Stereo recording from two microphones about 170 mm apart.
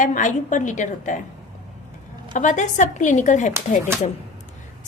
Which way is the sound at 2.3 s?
45° left (ahead or behind).